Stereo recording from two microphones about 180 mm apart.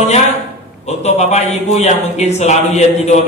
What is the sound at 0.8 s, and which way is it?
Speech, 35° left (ahead or behind).